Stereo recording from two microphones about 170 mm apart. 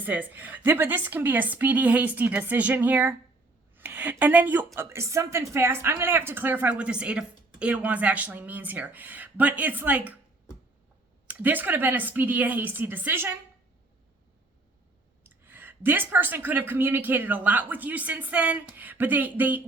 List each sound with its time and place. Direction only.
0.0 s speech: 10° right (ahead or behind)
11.3 s speech: 10° right (ahead or behind)
15.4 s speech: 10° right (ahead or behind)